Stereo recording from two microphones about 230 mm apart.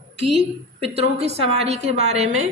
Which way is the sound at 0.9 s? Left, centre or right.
Right.